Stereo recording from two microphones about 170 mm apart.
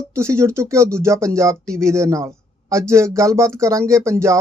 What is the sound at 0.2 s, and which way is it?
Speech, 15° right (ahead or behind).